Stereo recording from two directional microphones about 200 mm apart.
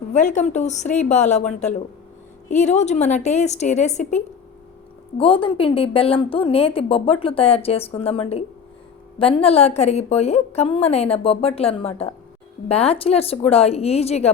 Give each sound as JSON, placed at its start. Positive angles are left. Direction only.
{"t": 0.1, "sound": "a woman's voice", "side_deg": 35}